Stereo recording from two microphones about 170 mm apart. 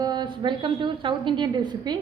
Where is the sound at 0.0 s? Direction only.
25° right (ahead or behind).